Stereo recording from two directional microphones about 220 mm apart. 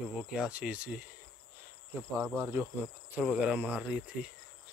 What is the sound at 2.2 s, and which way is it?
Speech, 10° right (ahead or behind).